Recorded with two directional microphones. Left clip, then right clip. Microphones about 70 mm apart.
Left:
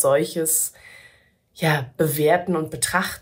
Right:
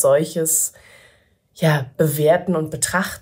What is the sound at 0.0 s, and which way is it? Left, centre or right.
Speech, right.